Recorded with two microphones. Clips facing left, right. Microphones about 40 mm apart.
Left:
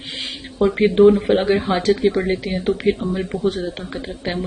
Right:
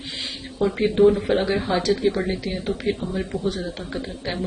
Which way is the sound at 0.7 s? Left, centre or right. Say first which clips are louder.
Left 4 dB; left.